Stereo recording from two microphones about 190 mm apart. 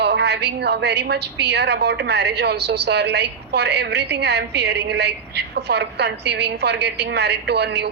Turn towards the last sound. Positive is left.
turn(degrees=-60)  # may be behind; listen again after turning